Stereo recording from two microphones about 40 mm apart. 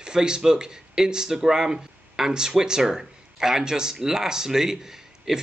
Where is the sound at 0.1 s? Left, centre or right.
Centre.